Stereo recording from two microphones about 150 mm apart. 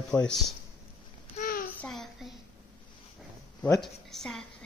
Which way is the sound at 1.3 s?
70° left (ahead or behind).